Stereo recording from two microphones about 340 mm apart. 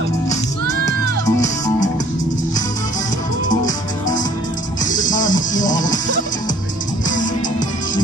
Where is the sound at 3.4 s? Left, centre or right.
Left.